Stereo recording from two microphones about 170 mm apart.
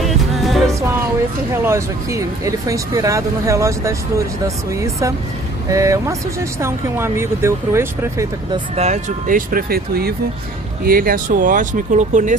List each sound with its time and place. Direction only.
0.0 s music: centre (ahead or behind)
1.5 s speech: 15° right (ahead or behind)
5.7 s speech: 20° right (ahead or behind)
8.7 s speech: 40° right (ahead or behind)